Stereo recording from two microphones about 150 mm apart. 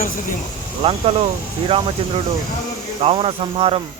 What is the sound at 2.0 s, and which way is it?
Speech, 40° right (ahead or behind).